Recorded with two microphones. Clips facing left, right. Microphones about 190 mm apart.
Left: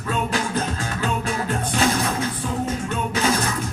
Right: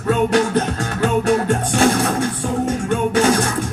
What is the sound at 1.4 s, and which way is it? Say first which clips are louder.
Music: right 6 dB; 55° right (ahead or behind).